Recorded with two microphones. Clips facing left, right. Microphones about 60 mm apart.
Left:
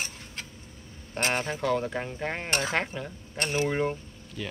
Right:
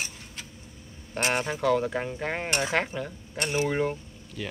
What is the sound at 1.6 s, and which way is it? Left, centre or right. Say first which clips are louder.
Speech: right 3 dB; centre.